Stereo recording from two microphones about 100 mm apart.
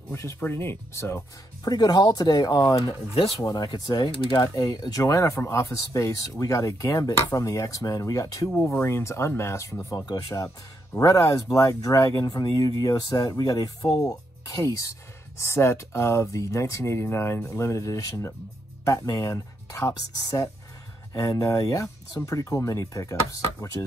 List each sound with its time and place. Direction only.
0.1 s speech: 30° left (ahead or behind)
1.7 s speech: 40° left (ahead or behind)
4.2 s speech: 60° left (ahead or behind)
4.6 s speech: 40° left (ahead or behind)
10.0 s speech: 50° left (ahead or behind)
11.0 s speech: 35° left (ahead or behind)